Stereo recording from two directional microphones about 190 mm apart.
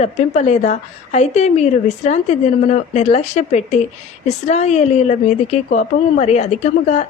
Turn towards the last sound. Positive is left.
turn(degrees=35)  # may be behind; listen again after turning